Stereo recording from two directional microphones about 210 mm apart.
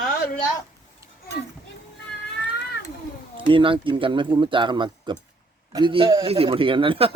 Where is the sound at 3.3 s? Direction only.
25° right (ahead or behind).